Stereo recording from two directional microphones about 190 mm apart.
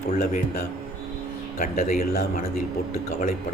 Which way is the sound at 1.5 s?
45° left (ahead or behind).